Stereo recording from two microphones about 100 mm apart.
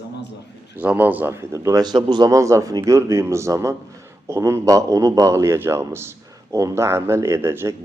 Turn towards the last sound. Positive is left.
turn(degrees=-25)  # may be behind; listen again after turning